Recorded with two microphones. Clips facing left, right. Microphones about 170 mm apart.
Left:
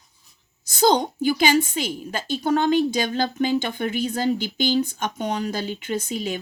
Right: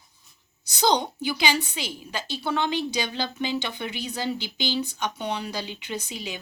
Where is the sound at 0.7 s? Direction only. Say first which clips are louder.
Left 4 dB; 45° left (ahead or behind).